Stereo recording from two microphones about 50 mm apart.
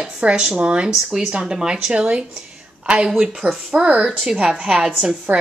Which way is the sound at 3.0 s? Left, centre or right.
Centre.